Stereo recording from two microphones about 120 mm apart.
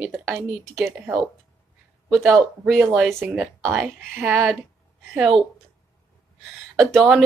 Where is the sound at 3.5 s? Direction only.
20° right (ahead or behind).